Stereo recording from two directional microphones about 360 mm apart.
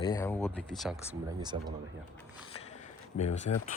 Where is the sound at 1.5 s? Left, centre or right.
Centre.